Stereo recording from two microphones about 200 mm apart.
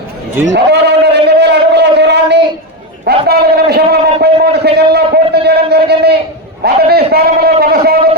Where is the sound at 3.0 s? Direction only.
55° right (ahead or behind).